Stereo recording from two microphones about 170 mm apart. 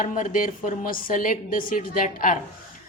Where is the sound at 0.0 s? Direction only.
50° left (ahead or behind).